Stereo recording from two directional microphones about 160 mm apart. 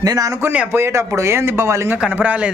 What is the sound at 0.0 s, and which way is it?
A man's voice, 20° right (ahead or behind).